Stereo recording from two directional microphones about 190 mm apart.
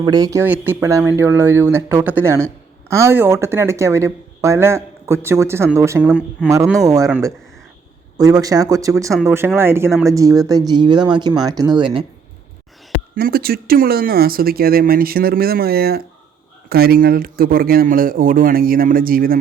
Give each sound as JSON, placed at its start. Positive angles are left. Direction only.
{"t": 0.0, "sound": "speech", "side_deg": -20}
{"t": 6.5, "sound": "speech", "side_deg": -15}
{"t": 13.1, "sound": "speech", "side_deg": -55}